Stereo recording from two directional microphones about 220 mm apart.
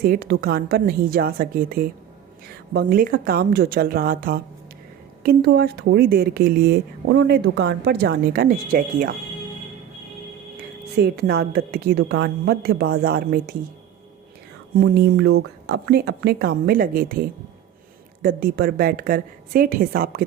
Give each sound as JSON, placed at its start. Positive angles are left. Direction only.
{"t": 0.0, "sound": "a woman's voice", "side_deg": -40}
{"t": 10.9, "sound": "a woman's voice", "side_deg": -45}
{"t": 14.8, "sound": "a woman's voice", "side_deg": -45}